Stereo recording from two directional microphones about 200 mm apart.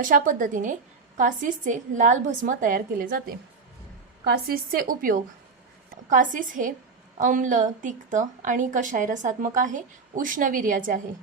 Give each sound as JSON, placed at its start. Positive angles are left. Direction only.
{"t": 0.0, "sound": "a woman's voice", "side_deg": -40}